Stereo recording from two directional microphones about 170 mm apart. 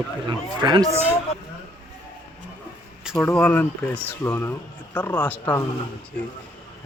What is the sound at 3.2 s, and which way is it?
Speech, 10° left (ahead or behind).